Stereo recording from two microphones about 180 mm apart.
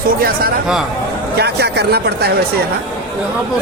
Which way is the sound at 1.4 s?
65° right (ahead or behind).